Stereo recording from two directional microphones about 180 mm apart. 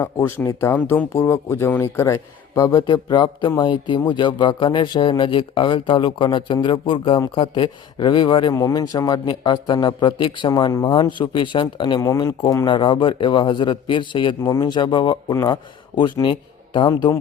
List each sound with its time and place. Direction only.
0.0 s speech: 15° left (ahead or behind)